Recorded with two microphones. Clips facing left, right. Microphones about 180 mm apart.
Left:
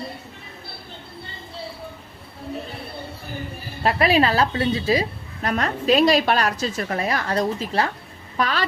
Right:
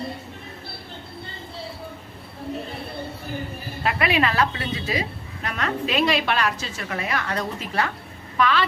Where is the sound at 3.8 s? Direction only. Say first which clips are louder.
Left 4 dB; 35° left (ahead or behind).